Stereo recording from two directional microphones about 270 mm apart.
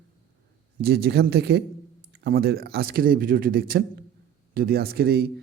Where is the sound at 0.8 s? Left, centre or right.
Right.